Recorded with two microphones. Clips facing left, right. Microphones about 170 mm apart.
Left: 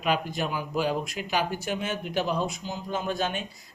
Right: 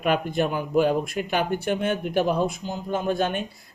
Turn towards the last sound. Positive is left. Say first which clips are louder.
# right 5 dB
turn(degrees=-55)  # may be behind; listen again after turning